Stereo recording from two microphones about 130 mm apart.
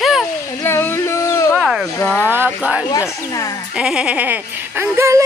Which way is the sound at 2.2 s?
15° right (ahead or behind).